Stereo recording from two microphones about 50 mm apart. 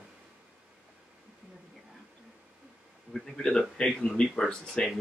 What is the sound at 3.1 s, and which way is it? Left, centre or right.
Speech, centre.